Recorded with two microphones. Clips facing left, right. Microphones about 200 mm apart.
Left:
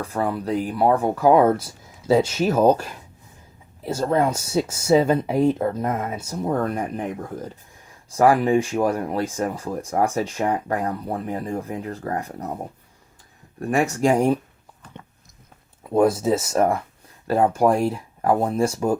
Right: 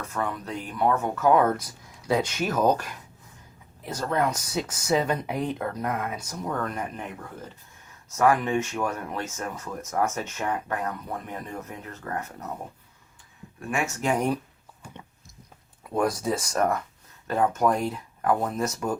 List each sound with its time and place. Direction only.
0.0 s speech: 35° left (ahead or behind)
13.6 s speech: 35° left (ahead or behind)
15.9 s speech: 25° left (ahead or behind)